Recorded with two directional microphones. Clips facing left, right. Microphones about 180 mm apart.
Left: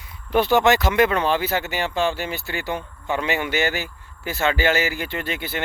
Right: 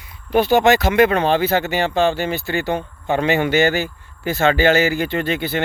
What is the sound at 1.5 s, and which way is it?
Speech, 30° right (ahead or behind).